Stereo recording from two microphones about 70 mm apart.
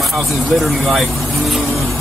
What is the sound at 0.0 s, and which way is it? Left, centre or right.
Speech, centre.